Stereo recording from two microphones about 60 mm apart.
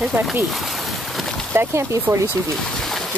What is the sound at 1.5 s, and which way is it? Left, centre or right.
Speech, right.